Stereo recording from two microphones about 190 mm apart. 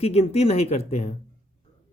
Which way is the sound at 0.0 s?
35° left (ahead or behind).